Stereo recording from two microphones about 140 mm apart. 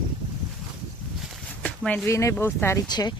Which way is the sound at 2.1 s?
20° left (ahead or behind).